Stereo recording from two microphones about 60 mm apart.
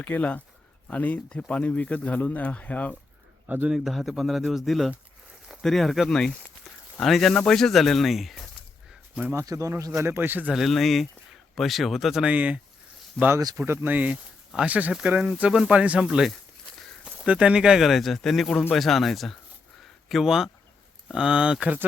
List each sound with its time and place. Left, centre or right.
0.0 s speech: left
3.4 s speech: right
3.7 s speech: centre
9.3 s speech: right
10.2 s speech: right
10.5 s speech: centre
12.2 s speech: right
13.2 s speech: centre
13.6 s speech: right
13.9 s speech: right
16.0 s speech: centre
17.2 s speech: centre
19.8 s a sound: centre
21.1 s speech: centre